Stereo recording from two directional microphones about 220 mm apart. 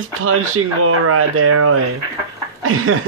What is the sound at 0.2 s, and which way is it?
Speech, 75° right (ahead or behind).